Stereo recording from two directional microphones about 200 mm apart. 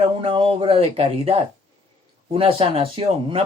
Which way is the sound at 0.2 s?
25° right (ahead or behind).